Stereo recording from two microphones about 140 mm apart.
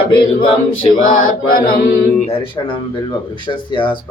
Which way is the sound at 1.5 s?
90° left.